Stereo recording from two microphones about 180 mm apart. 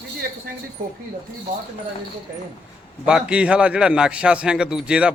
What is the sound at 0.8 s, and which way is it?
Speech, 50° right (ahead or behind).